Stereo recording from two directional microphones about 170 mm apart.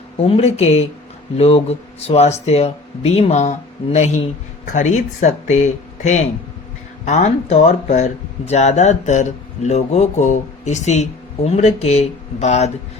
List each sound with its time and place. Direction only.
0.3 s speech: 35° left (ahead or behind)